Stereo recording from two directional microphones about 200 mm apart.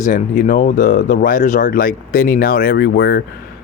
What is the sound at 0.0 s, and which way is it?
Speech, 40° left (ahead or behind).